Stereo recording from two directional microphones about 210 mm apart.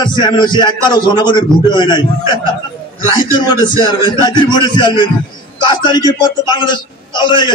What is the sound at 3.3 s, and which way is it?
A man's voice, 20° left (ahead or behind).